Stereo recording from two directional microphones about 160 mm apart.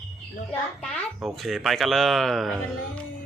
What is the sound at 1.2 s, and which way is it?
Speech, centre (ahead or behind).